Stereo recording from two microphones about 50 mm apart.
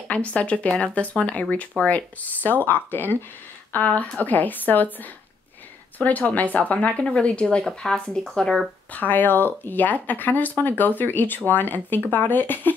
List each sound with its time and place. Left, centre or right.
0.1 s speech: left
5.9 s speech: left
7.0 s speech: centre
8.9 s speech: left